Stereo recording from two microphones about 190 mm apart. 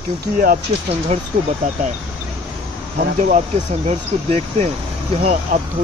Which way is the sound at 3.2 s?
40° right (ahead or behind).